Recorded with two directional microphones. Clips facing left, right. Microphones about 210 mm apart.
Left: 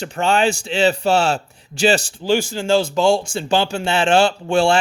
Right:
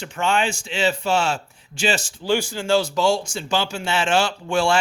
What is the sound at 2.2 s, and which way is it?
Speech, 15° left (ahead or behind).